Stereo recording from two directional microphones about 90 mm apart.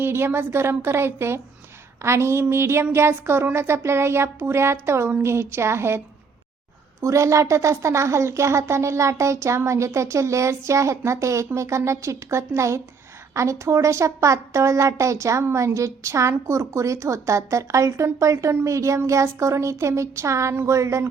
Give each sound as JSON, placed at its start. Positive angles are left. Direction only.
{"t": 0.0, "sound": "speech", "side_deg": -25}
{"t": 7.0, "sound": "a woman's voice", "side_deg": -35}